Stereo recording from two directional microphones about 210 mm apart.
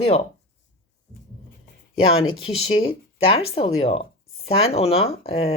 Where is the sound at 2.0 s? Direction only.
25° left (ahead or behind).